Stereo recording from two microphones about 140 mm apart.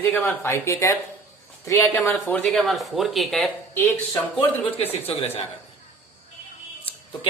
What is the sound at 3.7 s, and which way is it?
Speech, 15° left (ahead or behind).